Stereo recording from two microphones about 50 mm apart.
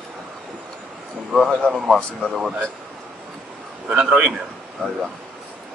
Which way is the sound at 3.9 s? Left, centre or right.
Centre.